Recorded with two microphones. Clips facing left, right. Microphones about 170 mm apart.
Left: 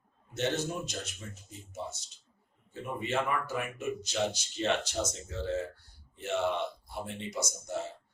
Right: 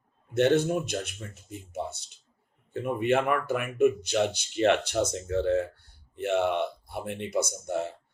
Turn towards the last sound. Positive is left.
turn(degrees=-60)  # may be behind; listen again after turning